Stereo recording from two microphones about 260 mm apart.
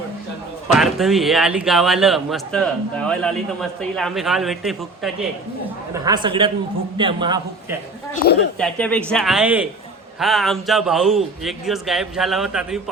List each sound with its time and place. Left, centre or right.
0.7 s speech: centre
5.9 s a man's voice: centre
8.5 s speech: centre